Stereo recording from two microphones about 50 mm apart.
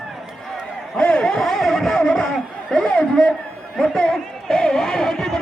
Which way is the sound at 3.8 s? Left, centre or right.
Centre.